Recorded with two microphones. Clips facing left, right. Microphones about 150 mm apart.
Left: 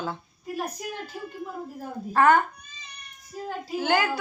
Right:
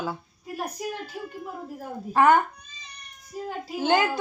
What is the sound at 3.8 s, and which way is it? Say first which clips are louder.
Speech: right 2 dB; 20° right (ahead or behind).